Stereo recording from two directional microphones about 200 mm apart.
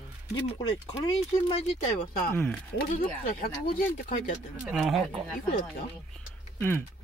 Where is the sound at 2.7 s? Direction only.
45° left (ahead or behind).